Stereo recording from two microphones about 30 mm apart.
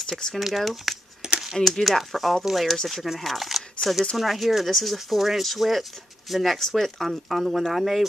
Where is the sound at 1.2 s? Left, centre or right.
Right.